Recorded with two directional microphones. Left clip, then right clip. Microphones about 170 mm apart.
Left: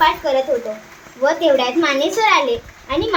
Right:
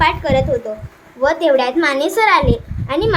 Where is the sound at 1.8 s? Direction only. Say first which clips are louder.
Right 2 dB; 10° right (ahead or behind).